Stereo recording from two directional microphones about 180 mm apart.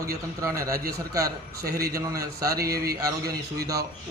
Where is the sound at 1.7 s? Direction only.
60° right (ahead or behind).